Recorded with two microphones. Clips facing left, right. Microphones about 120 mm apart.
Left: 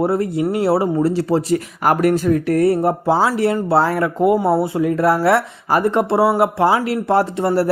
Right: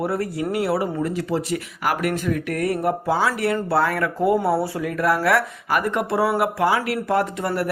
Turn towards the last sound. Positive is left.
turn(degrees=30)  # may be behind; listen again after turning